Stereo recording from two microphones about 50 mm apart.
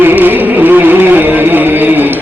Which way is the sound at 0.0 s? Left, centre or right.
Right.